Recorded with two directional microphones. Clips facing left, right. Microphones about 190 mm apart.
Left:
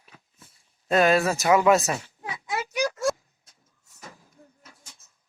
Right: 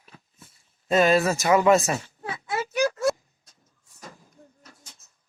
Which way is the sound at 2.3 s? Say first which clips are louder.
Right 2 dB; 15° left (ahead or behind).